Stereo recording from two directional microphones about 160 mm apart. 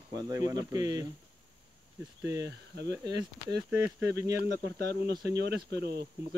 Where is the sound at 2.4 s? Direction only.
90° right.